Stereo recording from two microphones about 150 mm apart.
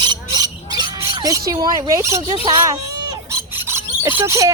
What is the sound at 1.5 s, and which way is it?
Speech, 25° right (ahead or behind).